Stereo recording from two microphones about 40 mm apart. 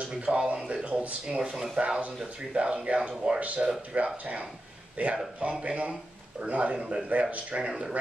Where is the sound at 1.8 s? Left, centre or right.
Right.